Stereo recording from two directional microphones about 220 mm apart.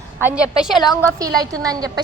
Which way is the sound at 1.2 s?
15° right (ahead or behind).